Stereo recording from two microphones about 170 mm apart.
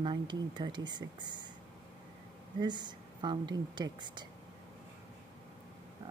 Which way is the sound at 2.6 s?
25° right (ahead or behind).